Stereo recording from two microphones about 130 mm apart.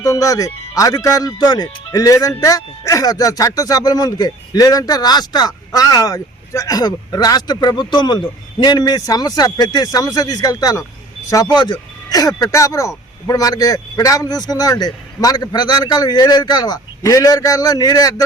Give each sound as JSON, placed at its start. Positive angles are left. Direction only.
{"t": 0.0, "sound": "speech", "side_deg": 25}